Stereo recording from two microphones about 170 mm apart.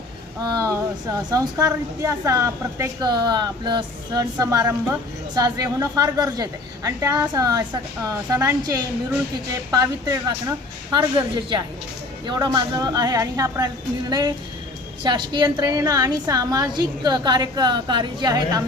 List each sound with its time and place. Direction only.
0.5 s a woman's voice: 20° right (ahead or behind)
12.2 s a woman's voice: 25° right (ahead or behind)